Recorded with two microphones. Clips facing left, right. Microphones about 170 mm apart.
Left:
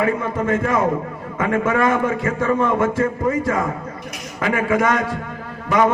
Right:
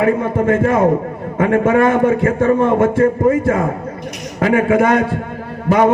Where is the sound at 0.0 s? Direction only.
55° right (ahead or behind).